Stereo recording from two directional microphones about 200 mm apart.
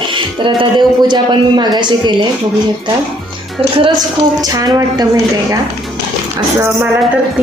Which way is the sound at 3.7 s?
20° right (ahead or behind).